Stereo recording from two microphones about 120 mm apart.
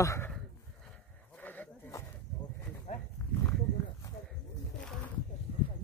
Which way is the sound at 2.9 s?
80° left.